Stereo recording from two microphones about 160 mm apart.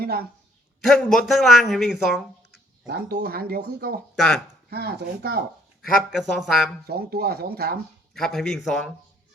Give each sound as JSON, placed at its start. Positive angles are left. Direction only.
{"t": 0.0, "sound": "speech", "side_deg": -70}
{"t": 0.9, "sound": "a man's voice", "side_deg": 0}
{"t": 2.8, "sound": "speech", "side_deg": -80}
{"t": 4.1, "sound": "speech", "side_deg": 0}
{"t": 4.7, "sound": "speech", "side_deg": -80}
{"t": 5.8, "sound": "a man's voice", "side_deg": 0}
{"t": 6.8, "sound": "speech", "side_deg": -75}
{"t": 8.1, "sound": "a man's voice", "side_deg": 0}